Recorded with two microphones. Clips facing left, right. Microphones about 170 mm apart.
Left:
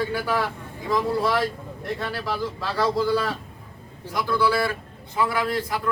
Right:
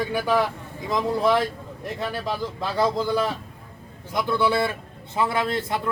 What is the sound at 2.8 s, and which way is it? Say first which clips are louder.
A man's voice: even; 20° right (ahead or behind).